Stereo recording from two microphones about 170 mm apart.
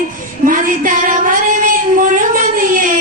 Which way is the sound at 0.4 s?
55° right (ahead or behind).